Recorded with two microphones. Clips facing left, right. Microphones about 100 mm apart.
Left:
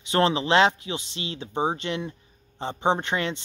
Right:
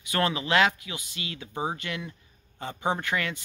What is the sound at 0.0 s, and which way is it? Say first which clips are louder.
Speech: left 5 dB; 25° left (ahead or behind).